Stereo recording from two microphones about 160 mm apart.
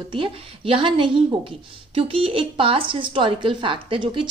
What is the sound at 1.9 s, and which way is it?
A woman's voice, 35° right (ahead or behind).